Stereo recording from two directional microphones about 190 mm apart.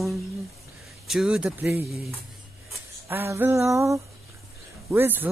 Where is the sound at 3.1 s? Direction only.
10° right (ahead or behind).